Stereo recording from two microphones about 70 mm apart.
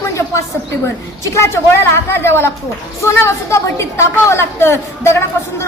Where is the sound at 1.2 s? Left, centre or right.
Left.